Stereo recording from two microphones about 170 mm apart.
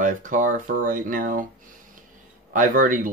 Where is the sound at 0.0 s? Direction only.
50° right (ahead or behind).